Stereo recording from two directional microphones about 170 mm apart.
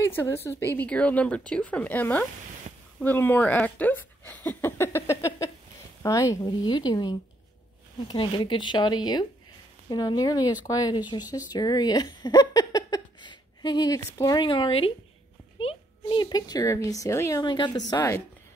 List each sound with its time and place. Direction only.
0.0 s a woman's voice: 15° left (ahead or behind)